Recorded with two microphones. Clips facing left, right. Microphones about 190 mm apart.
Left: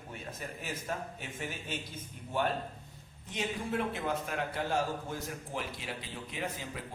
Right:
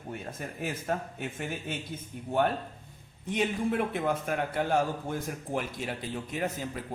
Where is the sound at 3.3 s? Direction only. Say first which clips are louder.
Right 6 dB; 60° right (ahead or behind).